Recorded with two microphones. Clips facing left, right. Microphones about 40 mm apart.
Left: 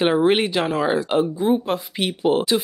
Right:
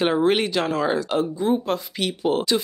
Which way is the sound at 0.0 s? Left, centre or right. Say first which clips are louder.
Left 2 dB; centre.